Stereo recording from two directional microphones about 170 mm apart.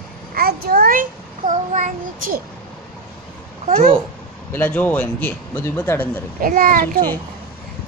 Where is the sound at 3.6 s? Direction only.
45° right (ahead or behind).